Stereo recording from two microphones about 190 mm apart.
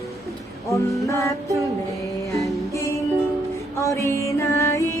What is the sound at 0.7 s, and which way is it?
Music, 15° left (ahead or behind).